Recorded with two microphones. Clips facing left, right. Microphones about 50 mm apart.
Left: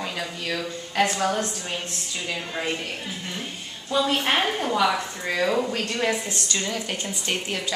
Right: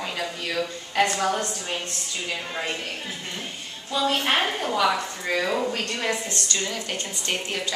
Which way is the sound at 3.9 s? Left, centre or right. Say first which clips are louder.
Left 1 dB; centre.